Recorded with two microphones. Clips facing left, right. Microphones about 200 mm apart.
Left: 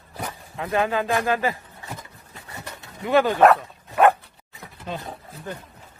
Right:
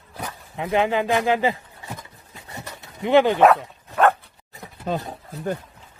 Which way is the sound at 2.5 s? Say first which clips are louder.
Right 1 dB; 20° right (ahead or behind).